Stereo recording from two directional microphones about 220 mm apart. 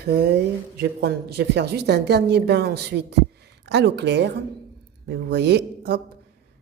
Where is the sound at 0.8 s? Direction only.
50° right (ahead or behind).